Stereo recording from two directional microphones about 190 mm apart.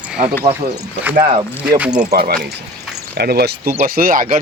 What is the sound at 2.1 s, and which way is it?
Speech, 55° right (ahead or behind).